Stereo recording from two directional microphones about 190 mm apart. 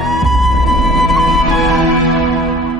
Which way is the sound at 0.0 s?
Centre (ahead or behind).